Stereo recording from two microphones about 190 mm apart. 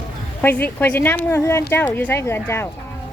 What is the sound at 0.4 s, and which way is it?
Speech, 10° left (ahead or behind).